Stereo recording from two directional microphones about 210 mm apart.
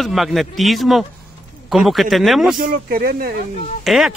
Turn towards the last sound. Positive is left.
turn(degrees=0)  # may be behind; listen again after turning